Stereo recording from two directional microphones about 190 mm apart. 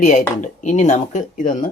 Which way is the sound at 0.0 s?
40° left (ahead or behind).